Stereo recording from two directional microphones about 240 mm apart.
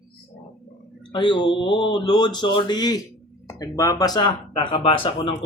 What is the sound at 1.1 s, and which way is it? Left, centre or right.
Speech, centre.